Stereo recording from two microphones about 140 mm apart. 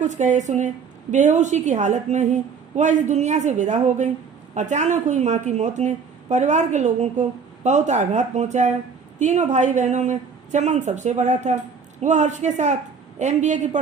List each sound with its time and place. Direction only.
0.0 s a woman's voice: 60° right (ahead or behind)